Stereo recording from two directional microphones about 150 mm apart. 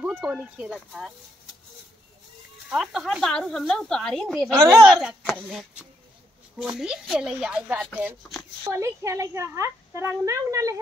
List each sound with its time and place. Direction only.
0.0 s speech: 10° right (ahead or behind)
2.7 s speech: 5° right (ahead or behind)
8.6 s speech: 20° right (ahead or behind)